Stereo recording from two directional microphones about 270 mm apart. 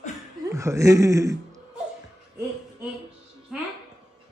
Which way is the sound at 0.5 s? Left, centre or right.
Centre.